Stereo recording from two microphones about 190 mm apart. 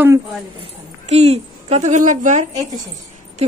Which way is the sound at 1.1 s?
35° right (ahead or behind).